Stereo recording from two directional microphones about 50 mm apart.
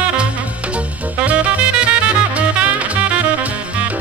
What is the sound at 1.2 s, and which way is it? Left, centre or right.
Music, right.